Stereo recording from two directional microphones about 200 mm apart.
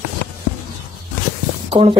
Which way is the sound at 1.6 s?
30° right (ahead or behind).